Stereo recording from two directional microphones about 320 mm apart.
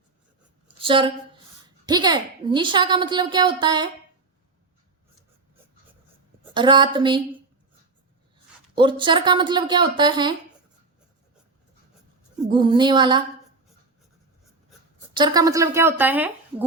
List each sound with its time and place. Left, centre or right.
0.8 s a woman's voice: centre
6.5 s a woman's voice: centre
8.7 s a woman's voice: centre
12.5 s a woman's voice: centre
15.1 s a woman's voice: centre